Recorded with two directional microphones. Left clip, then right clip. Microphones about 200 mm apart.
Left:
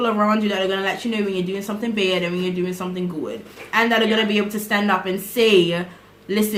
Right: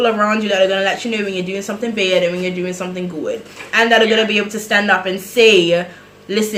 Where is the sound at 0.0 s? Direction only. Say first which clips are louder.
Right 4 dB; 20° left (ahead or behind).